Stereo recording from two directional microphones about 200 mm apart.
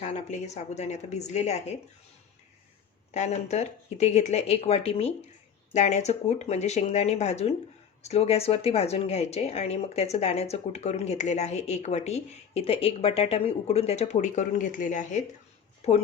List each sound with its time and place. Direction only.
0.0 s speech: 35° left (ahead or behind)
3.1 s speech: 35° left (ahead or behind)